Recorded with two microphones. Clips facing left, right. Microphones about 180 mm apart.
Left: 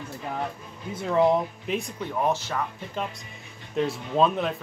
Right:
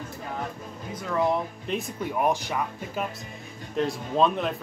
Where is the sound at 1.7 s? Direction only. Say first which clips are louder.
Right 2 dB; centre (ahead or behind).